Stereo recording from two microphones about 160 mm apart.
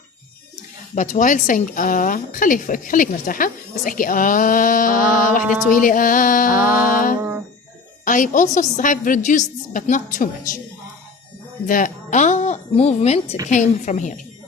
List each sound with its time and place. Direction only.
0.9 s a woman's voice: 50° left (ahead or behind)
7.2 s music: 15° right (ahead or behind)
8.0 s a woman's voice: 55° left (ahead or behind)
11.6 s a woman's voice: 55° left (ahead or behind)